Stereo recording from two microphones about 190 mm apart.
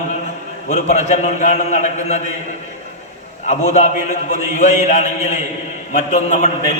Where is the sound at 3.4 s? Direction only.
40° left (ahead or behind).